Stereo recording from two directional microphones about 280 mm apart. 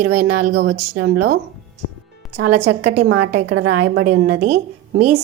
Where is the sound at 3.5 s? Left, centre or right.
Right.